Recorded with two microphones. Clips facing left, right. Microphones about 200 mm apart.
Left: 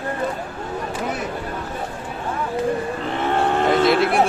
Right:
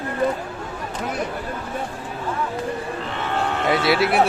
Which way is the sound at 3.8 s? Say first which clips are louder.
Left 2 dB; 50° left (ahead or behind).